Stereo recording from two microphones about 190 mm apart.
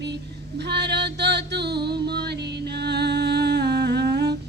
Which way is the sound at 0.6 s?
60° right (ahead or behind).